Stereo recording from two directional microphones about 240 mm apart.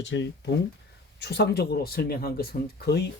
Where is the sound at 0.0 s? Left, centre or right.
Left.